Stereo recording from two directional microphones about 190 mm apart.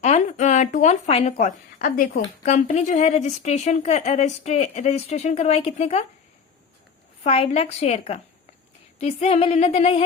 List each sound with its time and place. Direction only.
0.0 s a woman's voice: 35° left (ahead or behind)
7.3 s a woman's voice: 35° left (ahead or behind)